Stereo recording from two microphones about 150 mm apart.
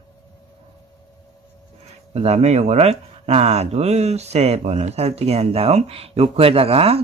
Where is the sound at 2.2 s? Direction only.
45° right (ahead or behind).